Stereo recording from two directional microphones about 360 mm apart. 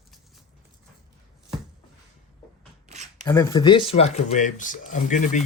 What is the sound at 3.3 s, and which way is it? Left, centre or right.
Speech, centre.